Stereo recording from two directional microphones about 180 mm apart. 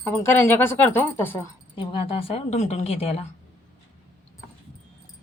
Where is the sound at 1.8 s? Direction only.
30° left (ahead or behind).